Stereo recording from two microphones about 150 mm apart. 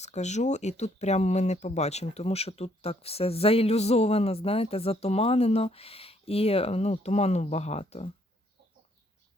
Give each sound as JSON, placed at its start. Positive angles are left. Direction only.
{"t": 0.0, "sound": "speech", "side_deg": 50}